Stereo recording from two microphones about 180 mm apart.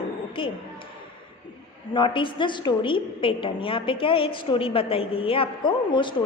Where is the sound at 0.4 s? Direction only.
30° left (ahead or behind).